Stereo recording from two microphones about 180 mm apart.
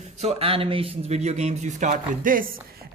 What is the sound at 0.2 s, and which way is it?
A man's voice, 35° right (ahead or behind).